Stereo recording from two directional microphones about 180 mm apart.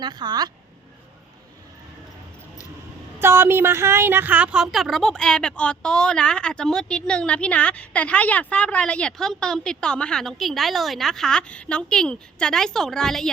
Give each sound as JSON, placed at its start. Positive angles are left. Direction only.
{"t": 0.0, "sound": "speech", "side_deg": -25}
{"t": 3.2, "sound": "a woman's voice", "side_deg": -15}